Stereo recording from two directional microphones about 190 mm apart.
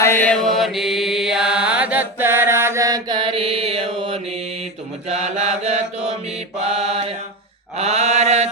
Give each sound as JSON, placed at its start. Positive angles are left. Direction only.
{"t": 0.0, "sound": "mantra", "side_deg": 10}